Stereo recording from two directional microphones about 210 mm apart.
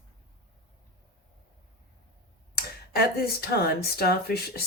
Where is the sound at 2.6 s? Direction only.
50° left (ahead or behind).